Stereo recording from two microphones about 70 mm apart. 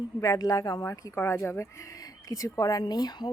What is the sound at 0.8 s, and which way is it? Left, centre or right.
Speech, left.